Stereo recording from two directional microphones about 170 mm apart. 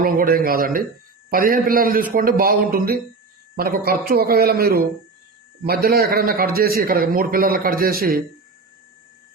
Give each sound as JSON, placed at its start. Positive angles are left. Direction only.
{"t": 0.0, "sound": "a man's voice", "side_deg": -60}